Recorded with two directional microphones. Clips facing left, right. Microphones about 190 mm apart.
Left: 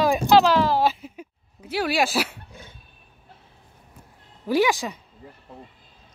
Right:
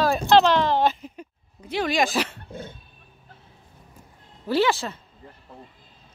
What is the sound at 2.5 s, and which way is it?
Dog, 50° right (ahead or behind).